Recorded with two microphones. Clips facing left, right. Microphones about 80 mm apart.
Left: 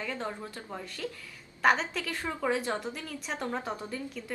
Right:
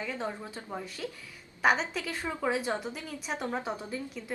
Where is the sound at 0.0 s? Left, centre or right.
Centre.